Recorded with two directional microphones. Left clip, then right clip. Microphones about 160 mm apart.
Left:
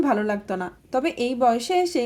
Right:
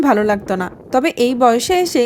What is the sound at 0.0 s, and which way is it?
A woman's voice, 65° right (ahead or behind).